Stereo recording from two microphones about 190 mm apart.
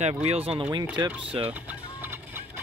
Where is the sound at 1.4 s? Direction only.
10° right (ahead or behind).